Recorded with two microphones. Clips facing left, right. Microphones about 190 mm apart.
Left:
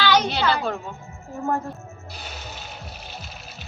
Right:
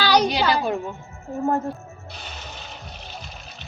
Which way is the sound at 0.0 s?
35° right (ahead or behind).